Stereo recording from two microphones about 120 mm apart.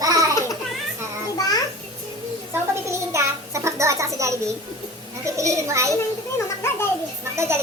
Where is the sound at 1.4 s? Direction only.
30° left (ahead or behind).